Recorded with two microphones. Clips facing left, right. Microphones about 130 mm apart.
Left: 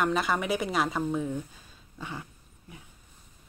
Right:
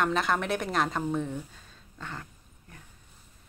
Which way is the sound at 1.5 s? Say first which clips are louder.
Left 3 dB; 10° left (ahead or behind).